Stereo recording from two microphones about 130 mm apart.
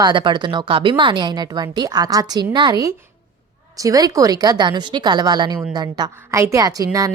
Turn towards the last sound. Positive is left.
turn(degrees=-25)  # may be behind; listen again after turning